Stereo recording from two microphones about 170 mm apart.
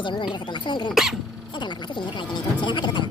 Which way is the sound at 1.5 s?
25° left (ahead or behind).